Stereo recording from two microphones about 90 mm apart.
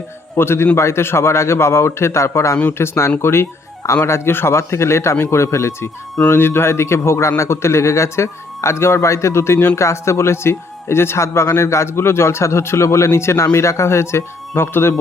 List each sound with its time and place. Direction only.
0.3 s a man's voice: 25° left (ahead or behind)